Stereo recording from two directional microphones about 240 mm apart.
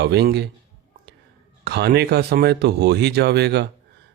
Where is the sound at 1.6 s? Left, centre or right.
Right.